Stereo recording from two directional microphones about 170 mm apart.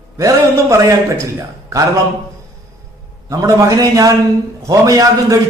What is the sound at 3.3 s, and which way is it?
A man's voice, 20° right (ahead or behind).